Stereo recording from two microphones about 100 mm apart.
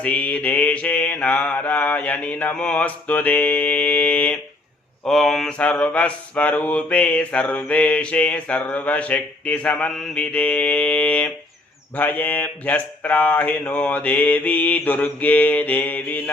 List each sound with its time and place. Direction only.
0.0 s mantra: 15° left (ahead or behind)
5.0 s speech: centre (ahead or behind)
5.5 s mantra: 15° left (ahead or behind)